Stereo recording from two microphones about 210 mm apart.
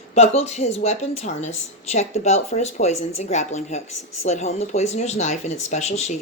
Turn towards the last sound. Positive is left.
turn(degrees=30)  # may be behind; listen again after turning